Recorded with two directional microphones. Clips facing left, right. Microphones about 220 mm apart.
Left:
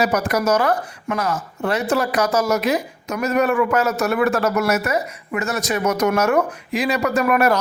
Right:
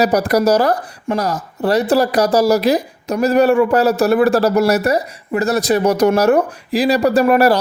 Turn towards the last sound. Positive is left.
turn(degrees=-30)  # may be behind; listen again after turning